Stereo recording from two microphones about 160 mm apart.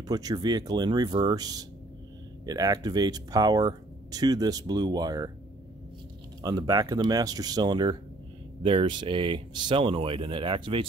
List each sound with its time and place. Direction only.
0.1 s speech: 25° right (ahead or behind)
6.4 s speech: 25° right (ahead or behind)